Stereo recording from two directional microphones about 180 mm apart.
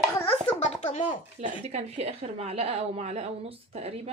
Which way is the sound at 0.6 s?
35° left (ahead or behind).